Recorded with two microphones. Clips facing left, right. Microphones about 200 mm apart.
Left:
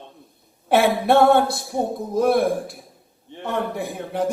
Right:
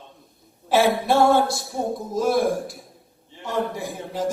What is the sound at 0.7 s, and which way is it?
A man's voice, 60° left (ahead or behind).